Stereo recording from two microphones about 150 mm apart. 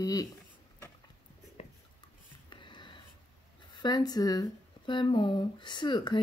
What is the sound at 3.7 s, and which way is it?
Speech, 25° left (ahead or behind).